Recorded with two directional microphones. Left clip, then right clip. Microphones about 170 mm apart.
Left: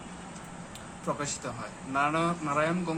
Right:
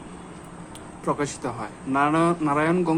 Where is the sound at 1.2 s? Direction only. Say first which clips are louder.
Right 7 dB; 45° right (ahead or behind).